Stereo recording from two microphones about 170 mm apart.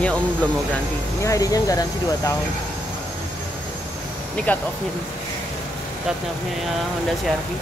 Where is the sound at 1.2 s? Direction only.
20° left (ahead or behind).